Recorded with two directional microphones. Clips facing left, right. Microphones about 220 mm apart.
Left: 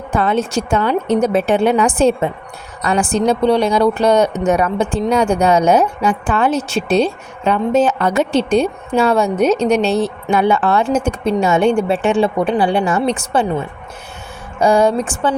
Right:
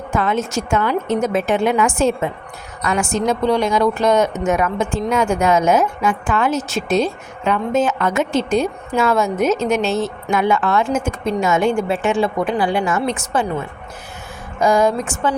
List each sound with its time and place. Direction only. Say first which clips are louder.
0.1 s a woman's voice: left 3 dB; 30° left (ahead or behind)
14.6 s a woman's voice: left 3 dB; 30° left (ahead or behind)